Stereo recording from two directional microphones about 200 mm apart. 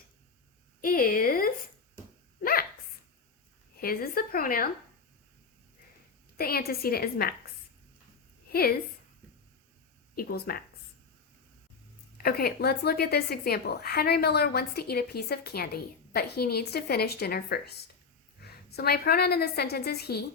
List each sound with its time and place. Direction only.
0.8 s a sound: 45° left (ahead or behind)
2.4 s dog: 45° left (ahead or behind)
3.8 s speech: 50° left (ahead or behind)
6.3 s speech: 50° left (ahead or behind)
8.4 s a woman's voice: 50° left (ahead or behind)
10.2 s speech: 50° left (ahead or behind)
12.1 s speech: 50° left (ahead or behind)